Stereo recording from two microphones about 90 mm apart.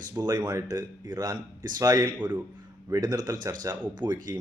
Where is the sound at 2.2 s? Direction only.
20° right (ahead or behind).